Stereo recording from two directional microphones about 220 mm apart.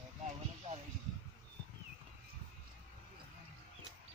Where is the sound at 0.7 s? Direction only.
30° right (ahead or behind).